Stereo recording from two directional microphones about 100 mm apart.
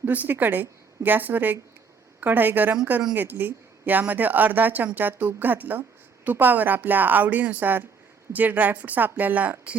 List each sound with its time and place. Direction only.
0.0 s speech: 15° right (ahead or behind)